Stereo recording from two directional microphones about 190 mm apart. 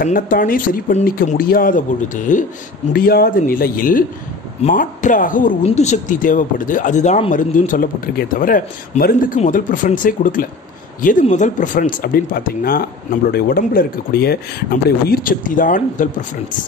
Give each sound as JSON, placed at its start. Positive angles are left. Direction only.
{"t": 0.0, "sound": "speech", "side_deg": 45}